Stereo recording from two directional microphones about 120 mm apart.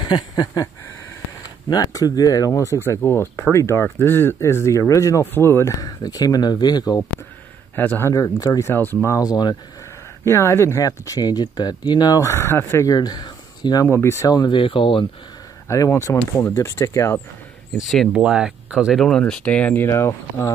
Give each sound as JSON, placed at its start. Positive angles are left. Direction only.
{"t": 0.0, "sound": "speech", "side_deg": 35}
{"t": 1.7, "sound": "speech", "side_deg": 30}
{"t": 7.7, "sound": "speech", "side_deg": 15}
{"t": 8.1, "sound": "speech", "side_deg": 30}
{"t": 10.2, "sound": "speech", "side_deg": 20}
{"t": 12.9, "sound": "speech", "side_deg": 35}
{"t": 13.8, "sound": "speech", "side_deg": 20}
{"t": 15.7, "sound": "speech", "side_deg": 25}
{"t": 17.7, "sound": "speech", "side_deg": 0}
{"t": 18.1, "sound": "speech", "side_deg": -10}
{"t": 18.9, "sound": "speech", "side_deg": 5}